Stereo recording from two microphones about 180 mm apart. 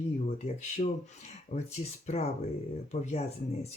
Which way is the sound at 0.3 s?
40° left (ahead or behind).